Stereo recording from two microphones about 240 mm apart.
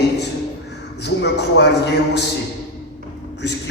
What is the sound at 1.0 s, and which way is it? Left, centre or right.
Speech, left.